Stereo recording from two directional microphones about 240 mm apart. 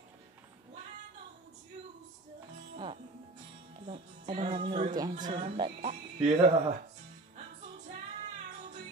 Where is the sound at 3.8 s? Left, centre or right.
Right.